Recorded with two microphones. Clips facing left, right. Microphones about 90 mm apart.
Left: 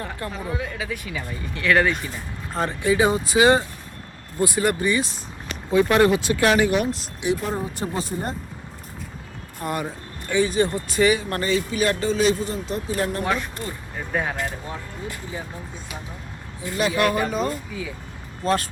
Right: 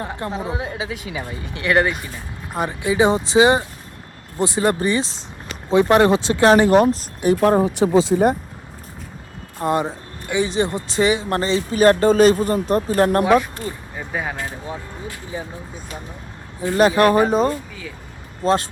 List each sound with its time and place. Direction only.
0.0 s a woman's voice: 25° right (ahead or behind); by 7.3 s 45° right (ahead or behind)
7.4 s speech: 75° right (ahead or behind)
9.6 s a woman's voice: 25° right (ahead or behind)
11.8 s speech: 45° right (ahead or behind)
13.9 s speech: 5° right (ahead or behind)
16.6 s speech: 40° right (ahead or behind)
17.7 s speech: 5° left (ahead or behind)
18.4 s a woman's voice: 25° right (ahead or behind)